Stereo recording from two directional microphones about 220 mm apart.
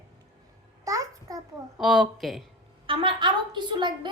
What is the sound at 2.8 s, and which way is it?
A woman's voice, 25° right (ahead or behind).